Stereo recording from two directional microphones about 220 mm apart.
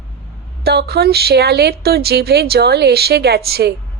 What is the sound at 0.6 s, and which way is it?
Speech, 45° right (ahead or behind).